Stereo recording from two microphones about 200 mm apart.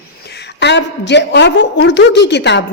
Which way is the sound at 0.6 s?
60° left (ahead or behind).